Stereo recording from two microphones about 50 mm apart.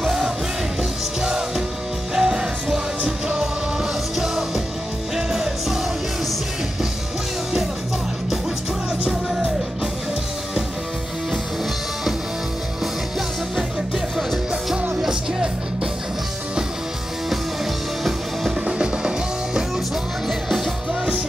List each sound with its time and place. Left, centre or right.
0.0 s music: centre
2.1 s music: centre
13.6 s music: centre
18.7 s music: centre
20.2 s music: centre